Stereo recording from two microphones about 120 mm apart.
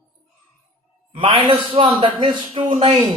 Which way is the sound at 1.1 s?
45° right (ahead or behind).